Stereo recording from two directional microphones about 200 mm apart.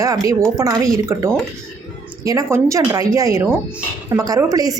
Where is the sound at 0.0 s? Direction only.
15° right (ahead or behind).